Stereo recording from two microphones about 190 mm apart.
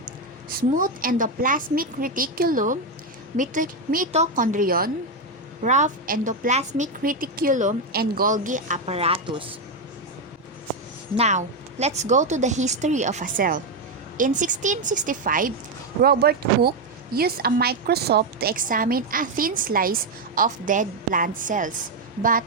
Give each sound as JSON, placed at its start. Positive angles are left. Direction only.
{"t": 0.5, "sound": "a woman's voice", "side_deg": -45}
{"t": 11.2, "sound": "a woman's voice", "side_deg": -35}